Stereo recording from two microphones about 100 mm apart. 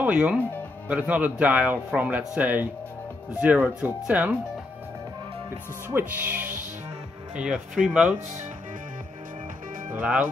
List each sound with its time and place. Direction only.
0.0 s speech: 10° right (ahead or behind)
5.9 s speech: 20° right (ahead or behind)
9.9 s speech: 10° right (ahead or behind)